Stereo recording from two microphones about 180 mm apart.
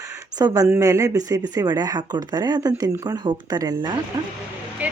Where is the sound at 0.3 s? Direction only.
20° right (ahead or behind).